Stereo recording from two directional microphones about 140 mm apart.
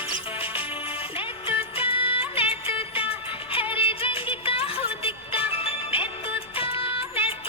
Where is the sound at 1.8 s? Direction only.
40° left (ahead or behind).